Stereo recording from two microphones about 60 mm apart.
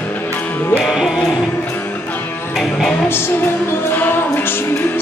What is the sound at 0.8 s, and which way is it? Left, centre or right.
Music, centre.